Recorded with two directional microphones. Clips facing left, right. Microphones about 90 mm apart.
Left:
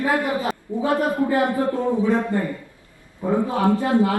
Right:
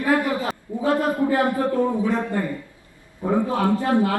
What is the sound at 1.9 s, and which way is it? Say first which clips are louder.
A woman's voice: left 2 dB; 20° left (ahead or behind).